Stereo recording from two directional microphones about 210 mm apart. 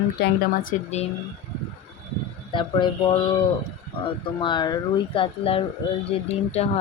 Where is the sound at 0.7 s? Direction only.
30° left (ahead or behind).